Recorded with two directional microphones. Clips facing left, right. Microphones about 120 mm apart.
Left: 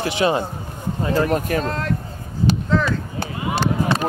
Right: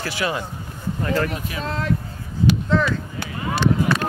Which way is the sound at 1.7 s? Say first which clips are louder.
Even; centre (ahead or behind).